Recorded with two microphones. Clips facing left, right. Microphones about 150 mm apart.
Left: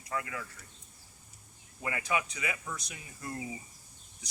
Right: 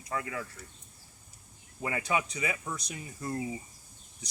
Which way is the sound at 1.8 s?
30° right (ahead or behind).